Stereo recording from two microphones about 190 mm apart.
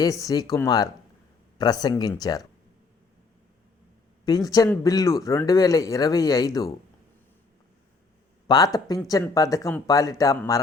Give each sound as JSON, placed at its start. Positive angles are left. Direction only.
{"t": 0.0, "sound": "speech", "side_deg": 20}
{"t": 4.3, "sound": "speech", "side_deg": 20}
{"t": 8.4, "sound": "speech", "side_deg": 20}